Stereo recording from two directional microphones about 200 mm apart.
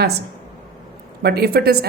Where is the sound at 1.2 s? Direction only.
55° right (ahead or behind).